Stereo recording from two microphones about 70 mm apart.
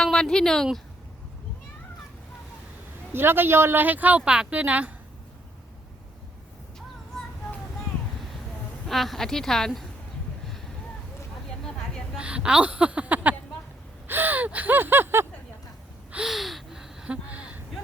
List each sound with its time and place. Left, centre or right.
0.0 s speech: centre
3.1 s speech: right
8.9 s a woman's voice: centre
12.1 s speech: centre
14.1 s gasp: right
16.2 s gasp: centre; by 17.6 s right